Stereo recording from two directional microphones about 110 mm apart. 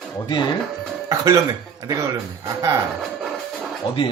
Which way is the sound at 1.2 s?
30° right (ahead or behind).